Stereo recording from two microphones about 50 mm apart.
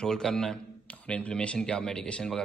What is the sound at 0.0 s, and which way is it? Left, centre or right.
Speech, centre.